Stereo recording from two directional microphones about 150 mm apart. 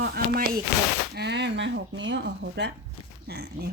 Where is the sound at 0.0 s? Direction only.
90° right.